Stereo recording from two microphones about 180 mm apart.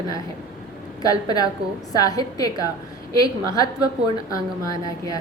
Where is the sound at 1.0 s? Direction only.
20° left (ahead or behind).